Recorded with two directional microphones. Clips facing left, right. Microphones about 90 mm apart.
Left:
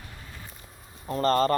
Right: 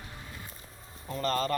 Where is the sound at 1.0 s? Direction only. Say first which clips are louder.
Left 7 dB; 40° left (ahead or behind).